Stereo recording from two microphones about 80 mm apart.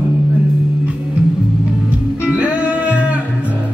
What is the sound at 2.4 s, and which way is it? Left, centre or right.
Music, centre.